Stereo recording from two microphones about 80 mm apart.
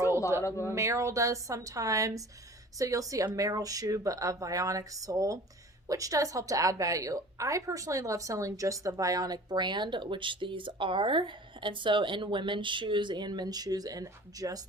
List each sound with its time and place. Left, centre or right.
0.4 s speech: left
0.7 s a woman's voice: right